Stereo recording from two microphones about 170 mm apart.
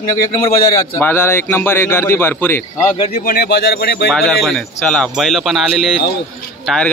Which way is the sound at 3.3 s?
70° left (ahead or behind).